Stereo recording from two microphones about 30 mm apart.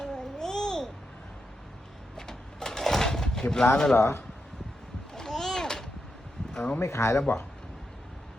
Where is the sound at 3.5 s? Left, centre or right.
Left.